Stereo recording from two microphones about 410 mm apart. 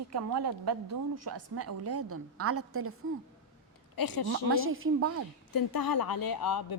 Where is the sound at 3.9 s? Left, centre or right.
Left.